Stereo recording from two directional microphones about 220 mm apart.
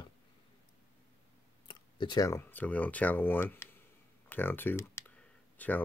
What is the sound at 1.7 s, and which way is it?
Speech, 20° left (ahead or behind).